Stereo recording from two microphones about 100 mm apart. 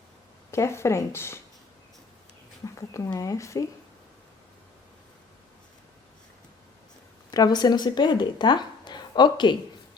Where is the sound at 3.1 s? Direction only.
35° left (ahead or behind).